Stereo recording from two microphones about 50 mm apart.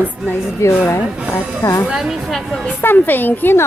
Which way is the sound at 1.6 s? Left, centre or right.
Left.